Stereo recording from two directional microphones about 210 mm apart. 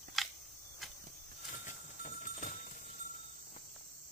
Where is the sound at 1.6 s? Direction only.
40° left (ahead or behind).